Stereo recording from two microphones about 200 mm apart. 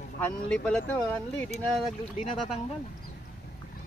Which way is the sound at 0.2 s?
5° left (ahead or behind).